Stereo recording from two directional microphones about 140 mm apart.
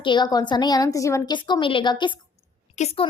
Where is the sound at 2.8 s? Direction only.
60° left (ahead or behind).